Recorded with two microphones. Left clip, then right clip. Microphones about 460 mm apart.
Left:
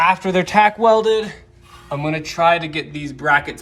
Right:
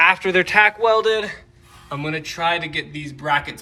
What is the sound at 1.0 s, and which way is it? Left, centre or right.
Speech, centre.